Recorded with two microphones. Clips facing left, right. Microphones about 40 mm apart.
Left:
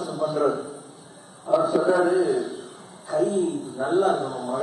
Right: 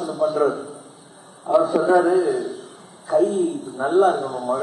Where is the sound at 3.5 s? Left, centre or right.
Centre.